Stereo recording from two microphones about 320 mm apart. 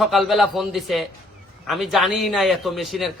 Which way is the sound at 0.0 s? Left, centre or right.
Centre.